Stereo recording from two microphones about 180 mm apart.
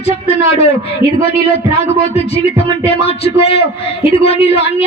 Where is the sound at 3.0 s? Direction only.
35° left (ahead or behind).